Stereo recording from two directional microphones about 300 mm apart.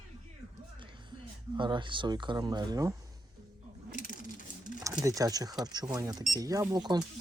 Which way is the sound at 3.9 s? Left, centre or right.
Left.